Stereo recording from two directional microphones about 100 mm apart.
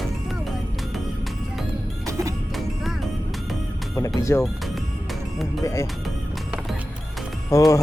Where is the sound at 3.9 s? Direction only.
30° left (ahead or behind).